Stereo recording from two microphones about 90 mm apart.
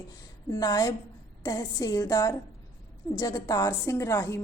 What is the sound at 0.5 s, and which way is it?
A woman's voice, 45° left (ahead or behind).